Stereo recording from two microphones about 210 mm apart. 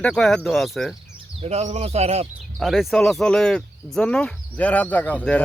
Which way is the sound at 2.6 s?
Centre (ahead or behind).